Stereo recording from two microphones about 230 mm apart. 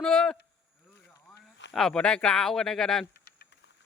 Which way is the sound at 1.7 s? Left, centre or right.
Centre.